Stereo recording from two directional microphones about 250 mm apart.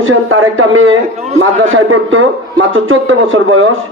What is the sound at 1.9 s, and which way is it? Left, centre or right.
A man's voice, right.